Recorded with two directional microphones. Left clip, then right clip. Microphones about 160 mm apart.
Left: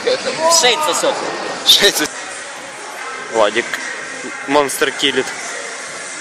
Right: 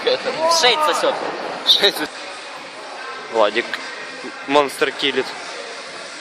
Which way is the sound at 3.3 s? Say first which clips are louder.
Left 2 dB; 5° right (ahead or behind).